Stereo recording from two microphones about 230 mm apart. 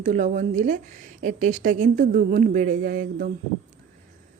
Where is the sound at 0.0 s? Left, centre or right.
Right.